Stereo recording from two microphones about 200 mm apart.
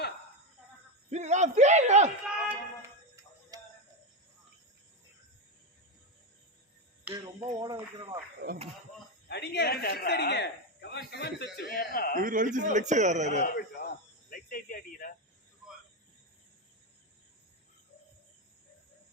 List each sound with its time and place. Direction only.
1.1 s a man's voice: 35° right (ahead or behind)
2.2 s music: 10° right (ahead or behind)
7.1 s speech: 20° right (ahead or behind)
9.3 s a man's voice: 55° left (ahead or behind)
12.2 s a man's voice: 40° right (ahead or behind)
13.5 s speech: 50° left (ahead or behind)